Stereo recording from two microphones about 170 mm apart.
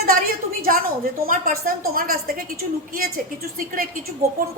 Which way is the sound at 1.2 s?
60° right (ahead or behind).